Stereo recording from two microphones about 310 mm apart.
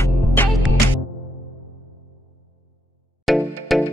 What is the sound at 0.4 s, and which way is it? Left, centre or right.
Music, centre.